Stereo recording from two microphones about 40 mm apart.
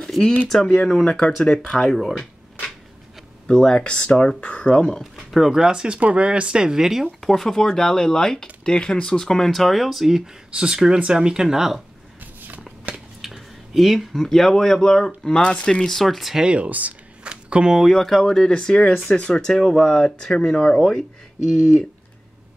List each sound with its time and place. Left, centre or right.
0.5 s speech: centre
3.4 s speech: centre
3.8 s speech: left
5.1 s speech: centre
5.9 s speech: right; by 7.1 s centre
7.2 s speech: centre
12.2 s a sound: right
13.2 s speech: centre
16.0 s speech: centre
16.4 s speech: right
17.2 s a sound: right
18.2 s speech: centre